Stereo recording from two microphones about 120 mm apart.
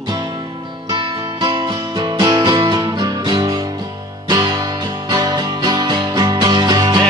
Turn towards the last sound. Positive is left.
turn(degrees=-35)  # may be behind; listen again after turning